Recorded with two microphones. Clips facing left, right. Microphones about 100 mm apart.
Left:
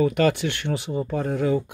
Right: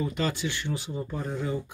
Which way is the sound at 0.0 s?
60° left (ahead or behind).